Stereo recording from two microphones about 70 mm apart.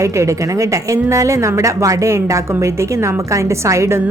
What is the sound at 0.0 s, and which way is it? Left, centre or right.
A woman's voice, right.